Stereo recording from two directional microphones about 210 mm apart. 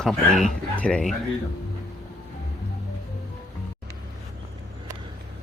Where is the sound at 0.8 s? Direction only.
5° left (ahead or behind).